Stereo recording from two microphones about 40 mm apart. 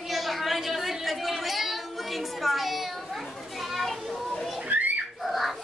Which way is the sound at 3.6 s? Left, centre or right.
Centre.